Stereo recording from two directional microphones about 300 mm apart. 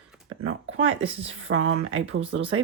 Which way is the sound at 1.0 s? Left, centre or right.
Right.